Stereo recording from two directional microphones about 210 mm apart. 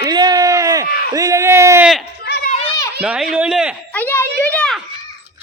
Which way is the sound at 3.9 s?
10° left (ahead or behind).